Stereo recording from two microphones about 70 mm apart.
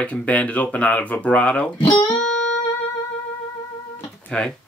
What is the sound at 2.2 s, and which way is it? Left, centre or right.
Music, centre.